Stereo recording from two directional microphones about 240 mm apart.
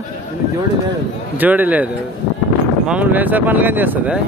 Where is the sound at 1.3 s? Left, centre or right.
Centre.